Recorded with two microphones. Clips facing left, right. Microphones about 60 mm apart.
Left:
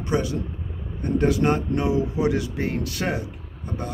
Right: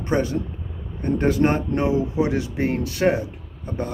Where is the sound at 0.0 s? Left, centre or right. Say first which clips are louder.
Right 2 dB; right.